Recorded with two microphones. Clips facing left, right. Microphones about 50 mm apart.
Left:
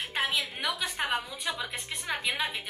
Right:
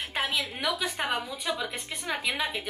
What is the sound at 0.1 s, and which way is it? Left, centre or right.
A woman's voice, centre.